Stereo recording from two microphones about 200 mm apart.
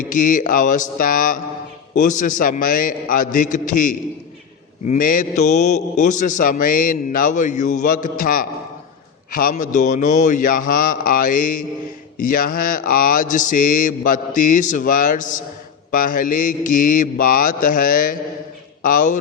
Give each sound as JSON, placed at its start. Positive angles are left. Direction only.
{"t": 0.1, "sound": "a man's voice", "side_deg": 40}